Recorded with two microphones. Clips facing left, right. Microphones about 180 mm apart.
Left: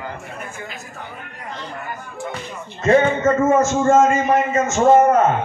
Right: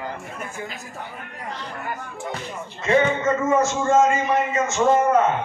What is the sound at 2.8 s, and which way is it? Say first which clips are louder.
A man's voice: left 4 dB; 45° left (ahead or behind).